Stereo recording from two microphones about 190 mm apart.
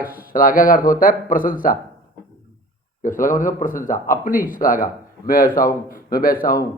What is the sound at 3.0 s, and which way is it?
Speech, 45° left (ahead or behind).